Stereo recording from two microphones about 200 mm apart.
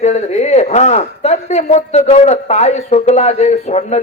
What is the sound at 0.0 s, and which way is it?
Speech, 35° left (ahead or behind).